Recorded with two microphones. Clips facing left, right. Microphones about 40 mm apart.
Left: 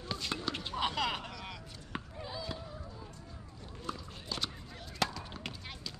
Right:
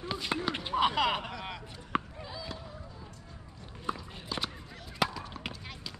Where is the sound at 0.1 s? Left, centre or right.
Centre.